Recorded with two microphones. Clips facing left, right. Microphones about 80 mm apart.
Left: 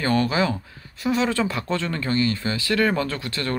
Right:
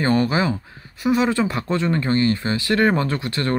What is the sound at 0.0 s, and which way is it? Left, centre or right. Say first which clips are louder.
Speech: right 2 dB; right.